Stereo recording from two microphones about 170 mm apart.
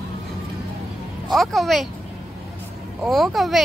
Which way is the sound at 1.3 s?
Centre (ahead or behind).